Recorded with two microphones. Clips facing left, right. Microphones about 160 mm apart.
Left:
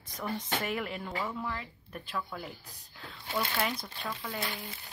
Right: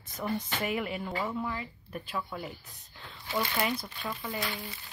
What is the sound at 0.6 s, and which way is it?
Speech, 5° right (ahead or behind).